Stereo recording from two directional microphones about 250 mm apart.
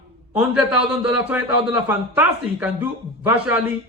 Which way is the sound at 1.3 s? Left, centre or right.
Centre.